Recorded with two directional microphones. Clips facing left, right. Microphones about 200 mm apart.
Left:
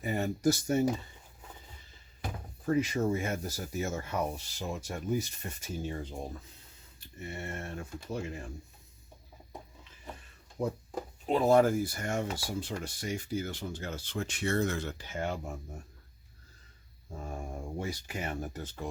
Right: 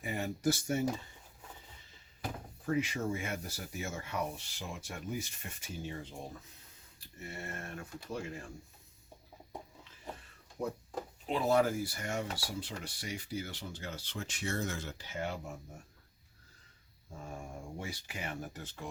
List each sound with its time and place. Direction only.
0.0 s speech: 40° left (ahead or behind)
2.6 s speech: 40° left (ahead or behind)
7.2 s speech: 25° left (ahead or behind)
10.6 s speech: 25° left (ahead or behind)
11.3 s speech: 45° left (ahead or behind)
17.7 s speech: 40° left (ahead or behind)